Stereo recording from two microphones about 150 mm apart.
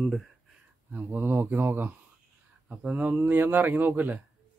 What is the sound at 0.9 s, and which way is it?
Speech, 15° right (ahead or behind).